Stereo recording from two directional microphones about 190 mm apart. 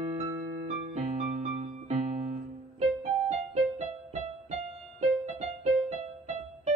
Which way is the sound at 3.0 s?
35° right (ahead or behind).